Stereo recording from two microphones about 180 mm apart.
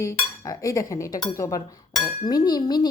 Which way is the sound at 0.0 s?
20° left (ahead or behind).